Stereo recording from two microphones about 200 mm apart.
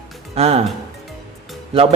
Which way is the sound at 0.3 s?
30° right (ahead or behind).